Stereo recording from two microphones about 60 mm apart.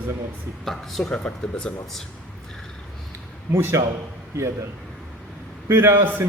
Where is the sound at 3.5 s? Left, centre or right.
Right.